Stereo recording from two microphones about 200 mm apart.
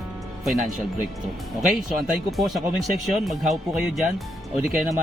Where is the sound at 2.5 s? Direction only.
Centre (ahead or behind).